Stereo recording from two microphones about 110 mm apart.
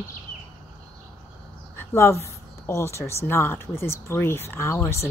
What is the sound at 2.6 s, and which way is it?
Speech, 25° left (ahead or behind).